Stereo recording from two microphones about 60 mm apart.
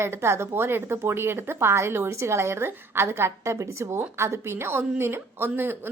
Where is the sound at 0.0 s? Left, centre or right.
Right.